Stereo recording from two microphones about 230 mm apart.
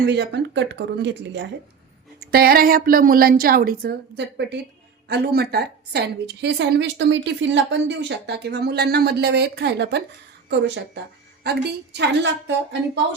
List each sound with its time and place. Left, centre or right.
0.0 s a woman's voice: right